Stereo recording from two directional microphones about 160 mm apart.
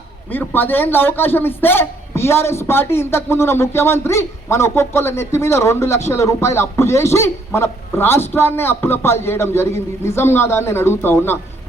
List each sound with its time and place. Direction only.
0.3 s a man's voice: 10° left (ahead or behind)